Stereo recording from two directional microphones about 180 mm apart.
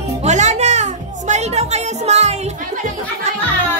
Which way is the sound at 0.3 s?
40° right (ahead or behind).